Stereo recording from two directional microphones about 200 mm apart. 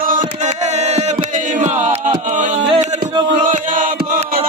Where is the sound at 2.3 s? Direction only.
40° right (ahead or behind).